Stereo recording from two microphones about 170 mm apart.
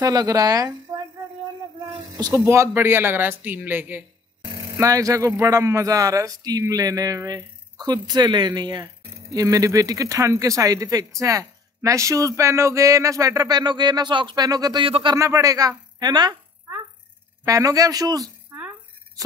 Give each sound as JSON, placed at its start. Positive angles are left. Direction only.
{"t": 0.0, "sound": "speech", "side_deg": -20}
{"t": 2.1, "sound": "speech", "side_deg": -20}
{"t": 15.1, "sound": "speech", "side_deg": -15}
{"t": 17.5, "sound": "speech", "side_deg": -20}